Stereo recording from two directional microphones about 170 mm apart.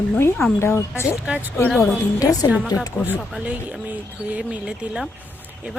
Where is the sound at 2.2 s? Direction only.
20° left (ahead or behind).